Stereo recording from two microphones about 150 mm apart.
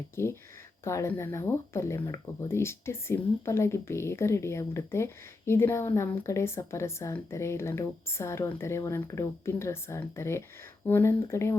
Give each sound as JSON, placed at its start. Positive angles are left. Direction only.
{"t": 0.2, "sound": "speech", "side_deg": 15}